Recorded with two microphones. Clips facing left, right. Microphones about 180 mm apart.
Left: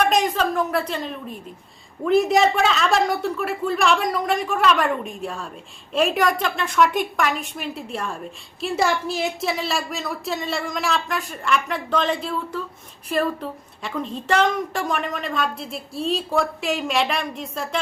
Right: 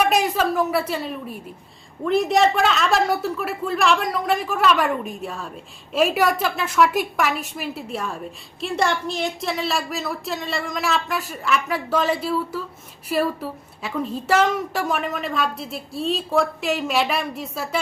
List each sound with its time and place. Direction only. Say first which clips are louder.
0.0 s a woman's voice: even; 10° right (ahead or behind)